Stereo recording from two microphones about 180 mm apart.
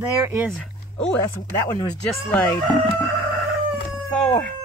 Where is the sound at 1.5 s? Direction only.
15° left (ahead or behind).